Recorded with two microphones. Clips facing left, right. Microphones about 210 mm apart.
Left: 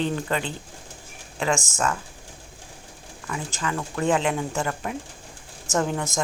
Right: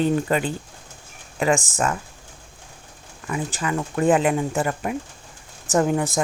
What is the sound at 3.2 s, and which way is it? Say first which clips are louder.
Speech: right 4 dB; 15° right (ahead or behind).